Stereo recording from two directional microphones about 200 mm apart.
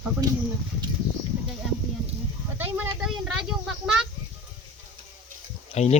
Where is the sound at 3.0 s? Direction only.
Centre (ahead or behind).